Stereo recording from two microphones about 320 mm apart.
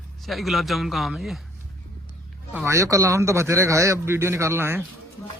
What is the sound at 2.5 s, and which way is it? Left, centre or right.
A man's voice, centre.